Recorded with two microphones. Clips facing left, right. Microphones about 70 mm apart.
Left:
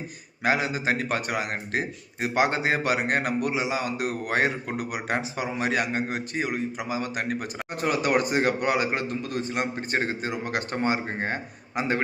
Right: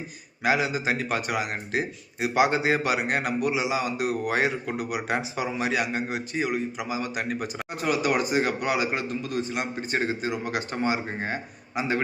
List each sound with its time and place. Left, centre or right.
0.4 s a man's voice: left